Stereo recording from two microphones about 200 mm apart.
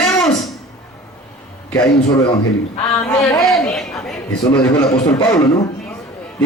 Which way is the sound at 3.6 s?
5° left (ahead or behind).